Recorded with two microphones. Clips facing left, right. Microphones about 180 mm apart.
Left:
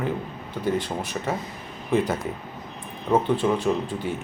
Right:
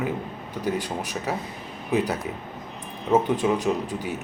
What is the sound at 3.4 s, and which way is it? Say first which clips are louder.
Speech: even; 5° right (ahead or behind).